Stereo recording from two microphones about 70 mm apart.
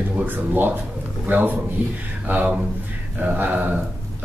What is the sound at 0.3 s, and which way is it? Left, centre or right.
Speech, right.